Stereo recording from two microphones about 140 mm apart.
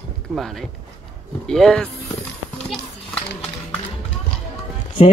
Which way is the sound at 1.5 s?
5° left (ahead or behind).